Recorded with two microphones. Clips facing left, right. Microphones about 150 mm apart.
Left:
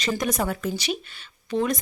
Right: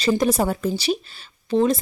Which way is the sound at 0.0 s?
30° right (ahead or behind).